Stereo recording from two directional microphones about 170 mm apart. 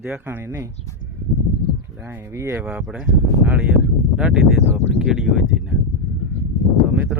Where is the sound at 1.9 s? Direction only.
10° right (ahead or behind).